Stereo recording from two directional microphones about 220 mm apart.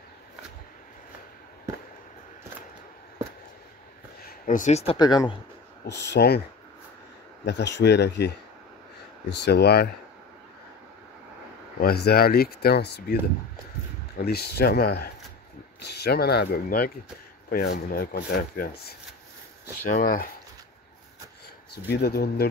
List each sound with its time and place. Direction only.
4.5 s speech: 35° left (ahead or behind); by 5.4 s 20° left (ahead or behind)
5.9 s speech: 50° left (ahead or behind)
7.4 s speech: 50° left (ahead or behind)
11.8 s speech: 45° left (ahead or behind)
21.9 s speech: 45° left (ahead or behind)